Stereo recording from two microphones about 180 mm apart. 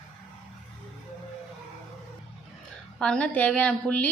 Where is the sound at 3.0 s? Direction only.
5° left (ahead or behind).